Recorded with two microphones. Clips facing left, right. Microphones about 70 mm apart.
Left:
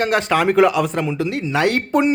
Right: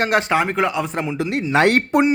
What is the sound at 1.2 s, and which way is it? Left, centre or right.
Speech, right.